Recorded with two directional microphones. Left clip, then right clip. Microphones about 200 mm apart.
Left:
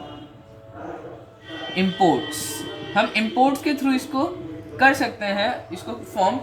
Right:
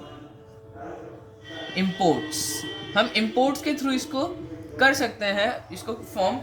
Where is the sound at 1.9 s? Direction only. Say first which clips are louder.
Left 3 dB; 30° right (ahead or behind).